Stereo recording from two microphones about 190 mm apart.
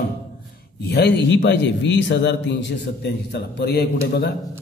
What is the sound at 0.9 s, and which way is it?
Speech, 65° left (ahead or behind).